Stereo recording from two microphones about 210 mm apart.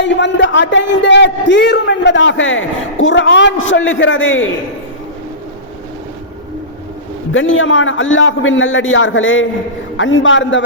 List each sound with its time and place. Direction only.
0.0 s a man's voice: 60° left (ahead or behind)
7.3 s a man's voice: 70° left (ahead or behind)